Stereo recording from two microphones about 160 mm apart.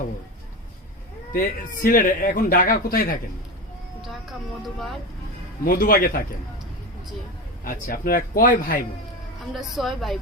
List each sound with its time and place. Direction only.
1.3 s speech: 60° left (ahead or behind)
4.0 s speech: centre (ahead or behind)
5.6 s speech: 65° left (ahead or behind)
7.6 s speech: 60° left (ahead or behind)
9.6 s speech: centre (ahead or behind)